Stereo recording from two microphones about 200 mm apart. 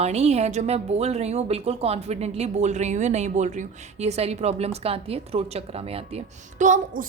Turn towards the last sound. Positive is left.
turn(degrees=-40)  # may be behind; listen again after turning